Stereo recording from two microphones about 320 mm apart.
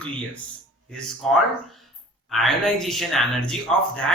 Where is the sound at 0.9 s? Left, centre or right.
Centre.